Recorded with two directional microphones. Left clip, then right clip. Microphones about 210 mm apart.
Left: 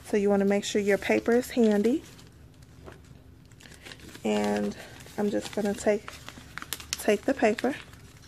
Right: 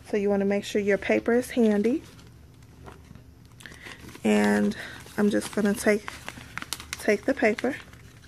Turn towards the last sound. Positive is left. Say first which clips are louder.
# right 1 dB
turn(degrees=0)  # may be behind; listen again after turning